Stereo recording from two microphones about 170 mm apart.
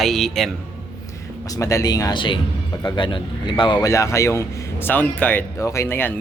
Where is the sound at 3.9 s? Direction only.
15° left (ahead or behind).